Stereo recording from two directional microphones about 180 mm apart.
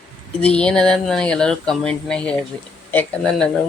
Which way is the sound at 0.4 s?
5° left (ahead or behind).